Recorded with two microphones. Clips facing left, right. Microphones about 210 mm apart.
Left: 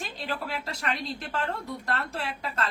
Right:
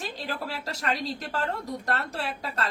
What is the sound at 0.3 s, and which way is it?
A woman's voice, 40° right (ahead or behind).